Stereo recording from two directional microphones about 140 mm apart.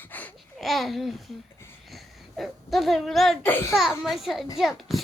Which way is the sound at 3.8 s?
Centre (ahead or behind).